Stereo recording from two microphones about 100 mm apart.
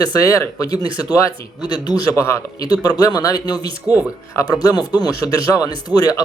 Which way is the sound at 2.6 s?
40° left (ahead or behind).